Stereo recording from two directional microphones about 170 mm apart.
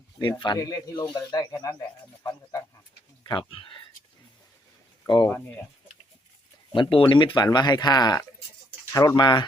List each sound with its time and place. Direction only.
0.2 s speech: 25° left (ahead or behind)
3.2 s speech: 30° left (ahead or behind)
5.0 s speech: 25° left (ahead or behind)
6.7 s speech: 30° left (ahead or behind)